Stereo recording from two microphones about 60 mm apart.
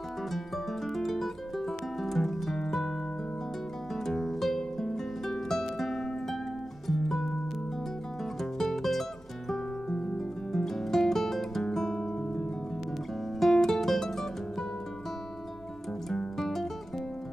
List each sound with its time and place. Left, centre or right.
0.9 s music: centre
3.9 s music: centre
8.4 s music: centre
16.1 s music: centre